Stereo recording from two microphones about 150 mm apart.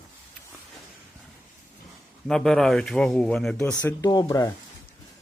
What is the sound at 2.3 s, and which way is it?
Speech, 5° left (ahead or behind).